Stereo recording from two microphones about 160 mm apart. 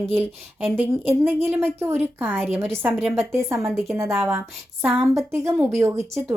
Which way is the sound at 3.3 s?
15° right (ahead or behind).